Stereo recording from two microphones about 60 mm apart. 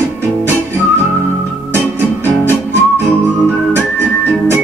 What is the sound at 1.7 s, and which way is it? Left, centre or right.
Music, right.